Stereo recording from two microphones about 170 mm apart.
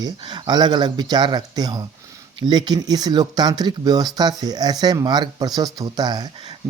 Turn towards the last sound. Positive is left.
turn(degrees=-25)  # may be behind; listen again after turning